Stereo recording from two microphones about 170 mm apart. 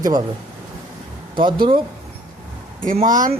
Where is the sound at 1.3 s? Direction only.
30° right (ahead or behind).